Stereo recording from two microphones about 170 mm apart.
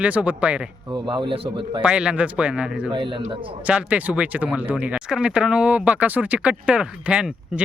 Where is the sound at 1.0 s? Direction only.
30° right (ahead or behind).